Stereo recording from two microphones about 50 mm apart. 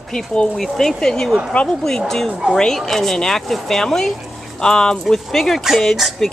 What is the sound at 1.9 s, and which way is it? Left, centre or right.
Speech, centre.